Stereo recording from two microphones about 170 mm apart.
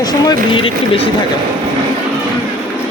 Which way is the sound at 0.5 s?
30° left (ahead or behind).